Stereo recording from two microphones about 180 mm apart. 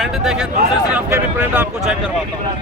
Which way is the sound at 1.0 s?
15° right (ahead or behind).